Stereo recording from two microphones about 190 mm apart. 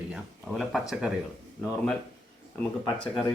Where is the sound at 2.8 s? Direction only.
5° left (ahead or behind).